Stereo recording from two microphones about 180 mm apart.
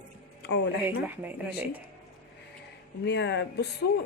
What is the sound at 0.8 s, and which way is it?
Speech, 10° right (ahead or behind).